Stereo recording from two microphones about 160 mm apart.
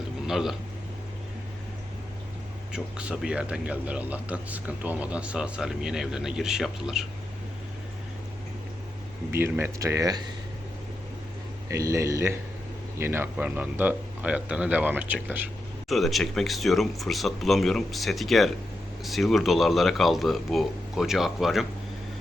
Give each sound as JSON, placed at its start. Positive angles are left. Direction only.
{"t": 0.3, "sound": "a man's voice", "side_deg": 0}
{"t": 2.7, "sound": "a man's voice", "side_deg": -5}
{"t": 9.3, "sound": "speech", "side_deg": -15}
{"t": 11.7, "sound": "a man's voice", "side_deg": -20}